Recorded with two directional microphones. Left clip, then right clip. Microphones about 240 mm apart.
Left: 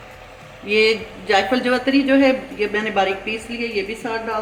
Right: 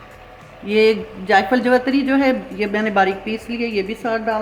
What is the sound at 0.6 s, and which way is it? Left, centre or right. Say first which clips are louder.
A man's voice: right 1 dB; right.